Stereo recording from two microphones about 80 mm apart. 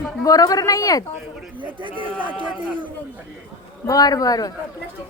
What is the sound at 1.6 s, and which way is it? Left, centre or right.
Speech, right.